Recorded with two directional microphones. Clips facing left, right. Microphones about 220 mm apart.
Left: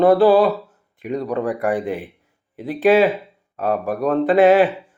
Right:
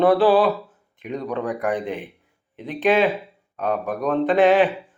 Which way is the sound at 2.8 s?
Centre (ahead or behind).